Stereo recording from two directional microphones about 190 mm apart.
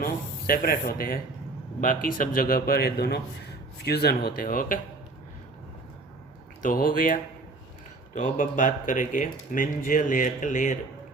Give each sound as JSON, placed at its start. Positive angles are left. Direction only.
{"t": 0.0, "sound": "speech", "side_deg": 50}
{"t": 6.6, "sound": "speech", "side_deg": 45}